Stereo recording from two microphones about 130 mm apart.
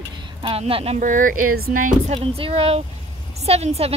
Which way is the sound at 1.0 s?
85° right.